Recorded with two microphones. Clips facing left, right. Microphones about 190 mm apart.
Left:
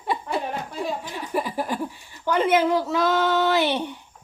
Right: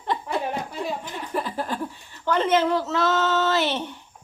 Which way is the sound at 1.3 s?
10° left (ahead or behind).